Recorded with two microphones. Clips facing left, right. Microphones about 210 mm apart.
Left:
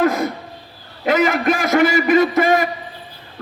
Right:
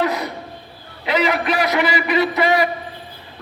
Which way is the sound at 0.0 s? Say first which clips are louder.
Left 4 dB; 45° left (ahead or behind).